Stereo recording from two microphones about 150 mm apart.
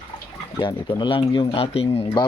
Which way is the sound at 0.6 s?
30° left (ahead or behind).